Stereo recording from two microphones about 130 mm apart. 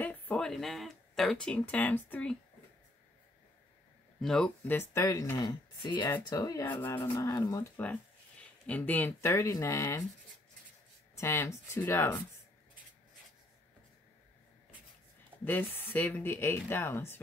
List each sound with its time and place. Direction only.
0.0 s speech: 10° left (ahead or behind)
4.2 s speech: 5° left (ahead or behind)
4.6 s speech: 20° left (ahead or behind)
5.4 s speech: 35° left (ahead or behind)
6.7 s speech: 15° left (ahead or behind)
7.8 s speech: 10° left (ahead or behind)
11.1 s speech: 20° left (ahead or behind)
15.4 s speech: 15° left (ahead or behind)